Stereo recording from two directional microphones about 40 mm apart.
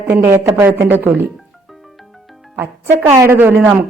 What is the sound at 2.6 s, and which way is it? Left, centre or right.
Speech, right.